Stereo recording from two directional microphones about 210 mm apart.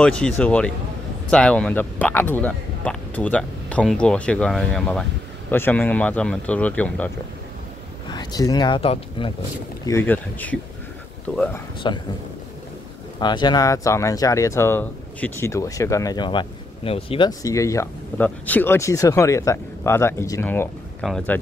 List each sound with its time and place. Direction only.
0.0 s speech: 5° left (ahead or behind)
8.1 s speech: 20° left (ahead or behind)
9.8 s speech: 10° left (ahead or behind)
11.8 s a man's voice: 20° left (ahead or behind)
13.2 s speech: 20° left (ahead or behind)
21.0 s speech: centre (ahead or behind)